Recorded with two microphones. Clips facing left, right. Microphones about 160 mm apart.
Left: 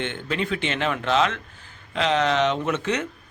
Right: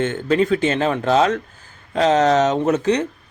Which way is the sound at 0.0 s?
40° right (ahead or behind).